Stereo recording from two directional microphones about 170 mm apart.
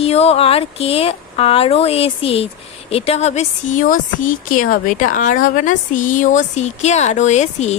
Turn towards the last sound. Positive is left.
turn(degrees=40)  # may be behind; listen again after turning